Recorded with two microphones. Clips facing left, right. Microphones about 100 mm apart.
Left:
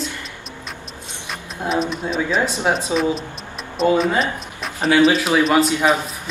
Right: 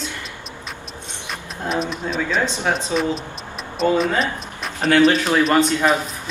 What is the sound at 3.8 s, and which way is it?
A man's voice, centre (ahead or behind).